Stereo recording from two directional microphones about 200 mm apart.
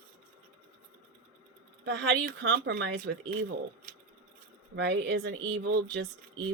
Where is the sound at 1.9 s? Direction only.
60° right (ahead or behind).